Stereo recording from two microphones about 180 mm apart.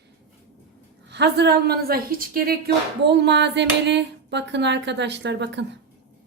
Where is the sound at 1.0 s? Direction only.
70° right (ahead or behind).